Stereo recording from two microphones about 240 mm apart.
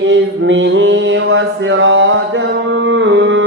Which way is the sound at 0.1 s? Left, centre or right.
Right.